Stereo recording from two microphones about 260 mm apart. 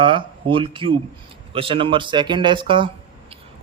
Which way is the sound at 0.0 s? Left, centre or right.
Centre.